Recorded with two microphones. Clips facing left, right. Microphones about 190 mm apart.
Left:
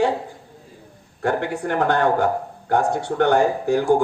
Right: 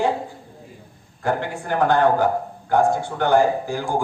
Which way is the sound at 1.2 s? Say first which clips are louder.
Left 2 dB; 65° left (ahead or behind).